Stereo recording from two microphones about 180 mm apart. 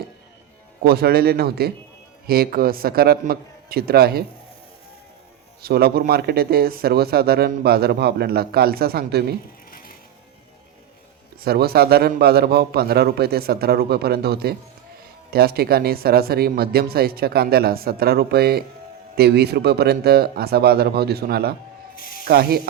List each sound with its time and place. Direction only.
0.8 s speech: 60° right (ahead or behind)
5.6 s speech: 60° right (ahead or behind)
9.7 s music: 55° left (ahead or behind)
11.3 s speech: 60° right (ahead or behind)